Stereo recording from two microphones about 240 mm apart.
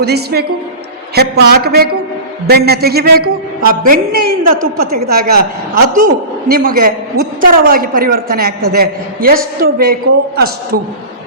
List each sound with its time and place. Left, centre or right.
0.0 s a man's voice: right